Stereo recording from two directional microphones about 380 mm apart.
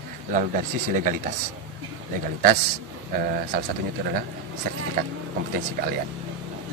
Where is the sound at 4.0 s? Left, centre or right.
Right.